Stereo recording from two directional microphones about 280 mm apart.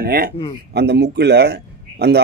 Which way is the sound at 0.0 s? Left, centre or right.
Right.